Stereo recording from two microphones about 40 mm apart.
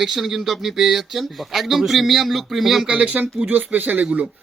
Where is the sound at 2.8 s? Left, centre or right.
Right.